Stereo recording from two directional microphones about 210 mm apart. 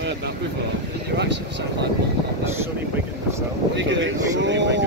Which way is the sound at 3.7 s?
60° right (ahead or behind).